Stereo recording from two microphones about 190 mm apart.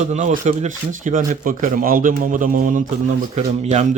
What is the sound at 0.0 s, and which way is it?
Speech, 40° right (ahead or behind).